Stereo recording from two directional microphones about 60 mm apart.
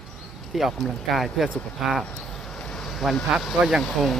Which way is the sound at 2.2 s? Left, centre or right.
Centre.